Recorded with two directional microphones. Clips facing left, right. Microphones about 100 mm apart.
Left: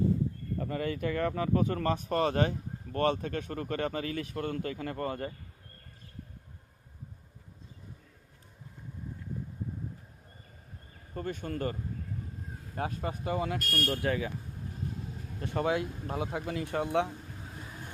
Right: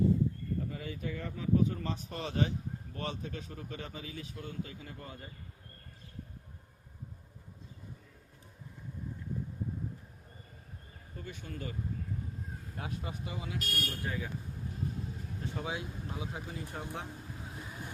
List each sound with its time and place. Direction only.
0.6 s speech: 60° left (ahead or behind)
11.1 s speech: 50° left (ahead or behind)
13.9 s speech: 70° left (ahead or behind)
15.4 s speech: 65° left (ahead or behind)